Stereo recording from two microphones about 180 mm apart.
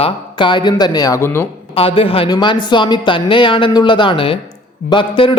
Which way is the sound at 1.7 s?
30° left (ahead or behind).